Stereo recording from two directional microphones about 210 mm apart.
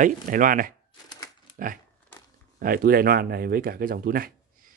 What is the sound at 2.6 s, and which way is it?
Speech, 45° right (ahead or behind).